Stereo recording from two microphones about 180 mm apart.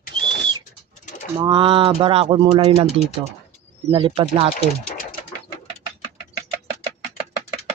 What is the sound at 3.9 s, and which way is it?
Speech, 30° right (ahead or behind).